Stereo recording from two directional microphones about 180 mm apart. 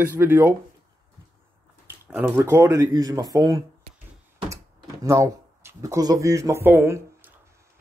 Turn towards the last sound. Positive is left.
turn(degrees=-10)  # may be behind; listen again after turning